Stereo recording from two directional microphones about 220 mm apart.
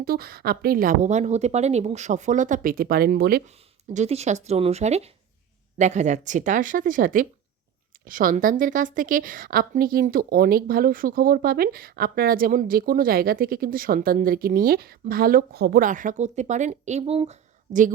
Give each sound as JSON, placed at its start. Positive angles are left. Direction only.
{"t": 0.0, "sound": "a woman's voice", "side_deg": -40}
{"t": 3.9, "sound": "a woman's voice", "side_deg": -30}